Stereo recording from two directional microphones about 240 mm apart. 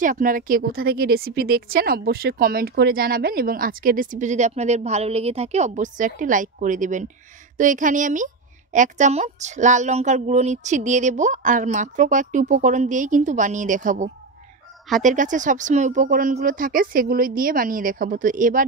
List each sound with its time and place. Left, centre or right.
0.0 s a woman's voice: right